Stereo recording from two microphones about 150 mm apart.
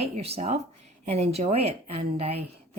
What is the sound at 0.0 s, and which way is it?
A woman's voice, 45° right (ahead or behind).